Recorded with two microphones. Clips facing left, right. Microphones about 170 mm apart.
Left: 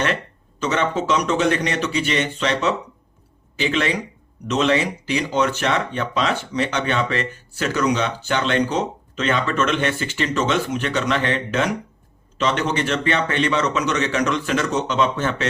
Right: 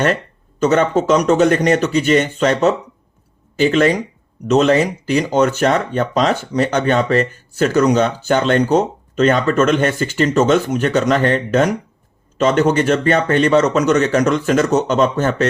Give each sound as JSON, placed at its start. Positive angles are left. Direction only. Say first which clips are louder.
{"t": 0.6, "sound": "speech", "louder": "right 7 dB", "side_deg": -45}